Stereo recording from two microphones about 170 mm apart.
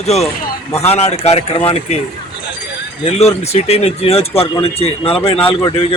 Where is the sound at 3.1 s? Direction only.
40° left (ahead or behind).